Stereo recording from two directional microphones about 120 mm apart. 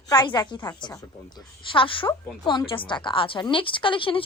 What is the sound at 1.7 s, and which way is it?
A woman's voice, 45° left (ahead or behind).